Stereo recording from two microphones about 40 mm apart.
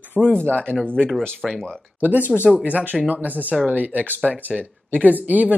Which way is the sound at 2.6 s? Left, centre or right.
Right.